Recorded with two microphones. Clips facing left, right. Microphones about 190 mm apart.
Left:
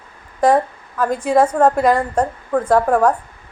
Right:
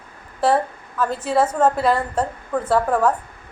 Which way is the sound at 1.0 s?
10° left (ahead or behind).